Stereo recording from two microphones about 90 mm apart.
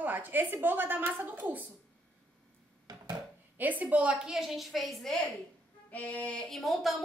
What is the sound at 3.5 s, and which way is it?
Female singing, 20° right (ahead or behind).